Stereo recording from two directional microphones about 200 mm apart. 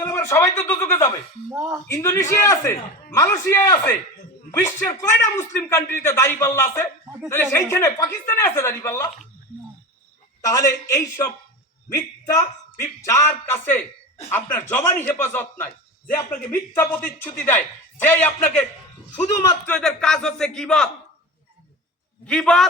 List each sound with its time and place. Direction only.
0.0 s speech: 15° left (ahead or behind)
1.5 s speech: 10° right (ahead or behind)
1.9 s a man's voice: 15° left (ahead or behind)
10.4 s a man's voice: 15° left (ahead or behind)
19.6 s speech: 5° left (ahead or behind)
22.3 s speech: 5° left (ahead or behind)